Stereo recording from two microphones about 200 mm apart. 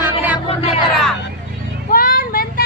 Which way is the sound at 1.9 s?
45° left (ahead or behind).